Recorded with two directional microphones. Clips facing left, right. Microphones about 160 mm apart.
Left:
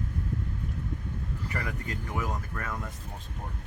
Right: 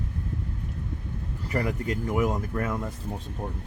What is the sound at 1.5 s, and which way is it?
Speech, 25° right (ahead or behind).